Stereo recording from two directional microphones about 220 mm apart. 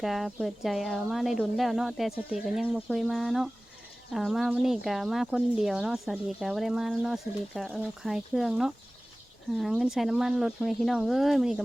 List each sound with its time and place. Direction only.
0.0 s speech: centre (ahead or behind)